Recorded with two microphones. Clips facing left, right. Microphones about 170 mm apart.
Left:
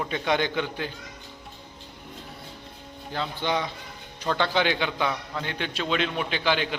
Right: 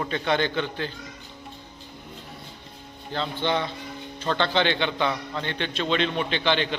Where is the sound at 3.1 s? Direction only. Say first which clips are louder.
Right 2 dB; 10° left (ahead or behind).